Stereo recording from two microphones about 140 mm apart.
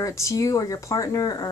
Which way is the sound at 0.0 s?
20° left (ahead or behind).